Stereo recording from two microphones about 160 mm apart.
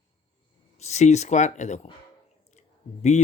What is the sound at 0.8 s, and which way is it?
Speech, 45° left (ahead or behind).